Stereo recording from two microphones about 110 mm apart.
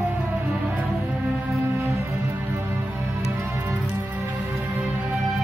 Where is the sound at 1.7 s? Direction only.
25° right (ahead or behind).